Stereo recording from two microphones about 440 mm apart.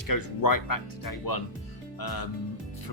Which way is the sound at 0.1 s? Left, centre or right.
Left.